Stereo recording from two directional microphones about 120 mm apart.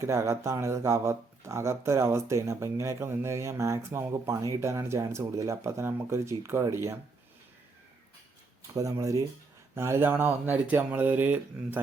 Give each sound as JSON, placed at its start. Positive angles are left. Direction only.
{"t": 0.0, "sound": "speech", "side_deg": -25}
{"t": 8.7, "sound": "speech", "side_deg": -25}